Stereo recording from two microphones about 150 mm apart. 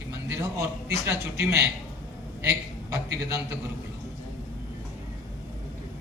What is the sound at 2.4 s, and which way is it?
Speech, 20° right (ahead or behind).